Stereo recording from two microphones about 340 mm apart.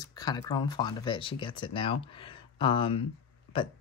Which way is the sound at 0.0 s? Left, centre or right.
Centre.